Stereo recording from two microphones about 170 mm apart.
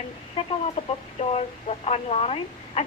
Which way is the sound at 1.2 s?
40° left (ahead or behind).